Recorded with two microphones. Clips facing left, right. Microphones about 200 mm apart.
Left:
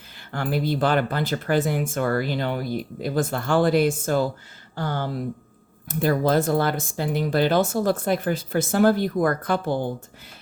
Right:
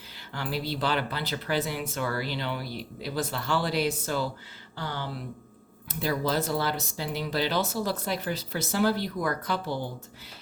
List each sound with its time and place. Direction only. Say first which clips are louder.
0.3 s speech: left 7 dB; 50° left (ahead or behind)